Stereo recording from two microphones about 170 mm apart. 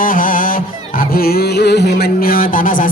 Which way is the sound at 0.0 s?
55° left (ahead or behind).